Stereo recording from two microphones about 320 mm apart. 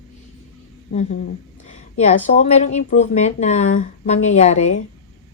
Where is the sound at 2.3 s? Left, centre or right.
Left.